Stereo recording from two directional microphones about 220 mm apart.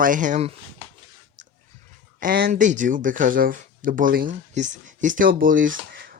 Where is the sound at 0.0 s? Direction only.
35° right (ahead or behind).